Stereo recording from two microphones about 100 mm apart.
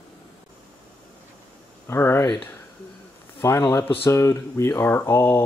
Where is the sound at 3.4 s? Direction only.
35° left (ahead or behind).